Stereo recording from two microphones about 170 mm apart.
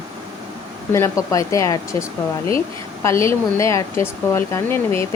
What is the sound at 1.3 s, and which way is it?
Speech, 20° left (ahead or behind).